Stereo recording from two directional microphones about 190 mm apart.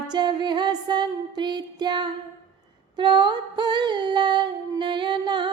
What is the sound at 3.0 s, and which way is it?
Female singing, 25° right (ahead or behind).